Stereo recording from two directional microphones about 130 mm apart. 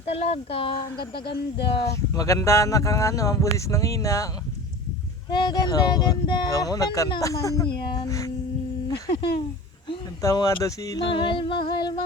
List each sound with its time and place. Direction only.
0.0 s speech: 50° left (ahead or behind)
1.8 s speech: 25° left (ahead or behind)
5.3 s music: 30° left (ahead or behind)
6.1 s speech: 35° left (ahead or behind)
8.9 s speech: 40° left (ahead or behind)
10.2 s speech: 25° left (ahead or behind)
11.1 s music: 40° left (ahead or behind)